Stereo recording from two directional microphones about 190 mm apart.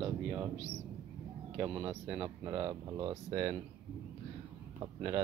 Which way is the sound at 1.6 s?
15° right (ahead or behind).